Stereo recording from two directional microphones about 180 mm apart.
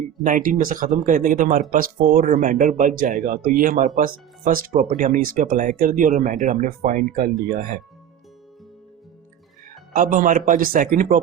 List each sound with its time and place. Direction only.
0.3 s speech: 45° right (ahead or behind)
9.9 s speech: 50° right (ahead or behind)